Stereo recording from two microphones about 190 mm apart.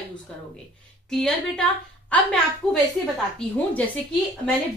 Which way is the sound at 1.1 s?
5° left (ahead or behind).